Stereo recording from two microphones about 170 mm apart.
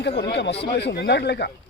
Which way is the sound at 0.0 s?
90° left.